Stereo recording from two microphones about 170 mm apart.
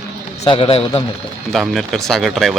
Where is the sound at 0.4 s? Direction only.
30° left (ahead or behind).